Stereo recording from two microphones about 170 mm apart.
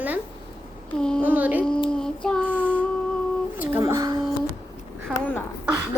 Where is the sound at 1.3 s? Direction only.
10° right (ahead or behind).